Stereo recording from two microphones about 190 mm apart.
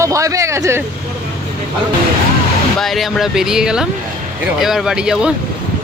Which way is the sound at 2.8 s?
Centre (ahead or behind).